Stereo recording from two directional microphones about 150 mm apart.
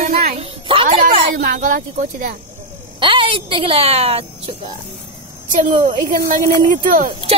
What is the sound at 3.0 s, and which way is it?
A woman's voice, 35° right (ahead or behind).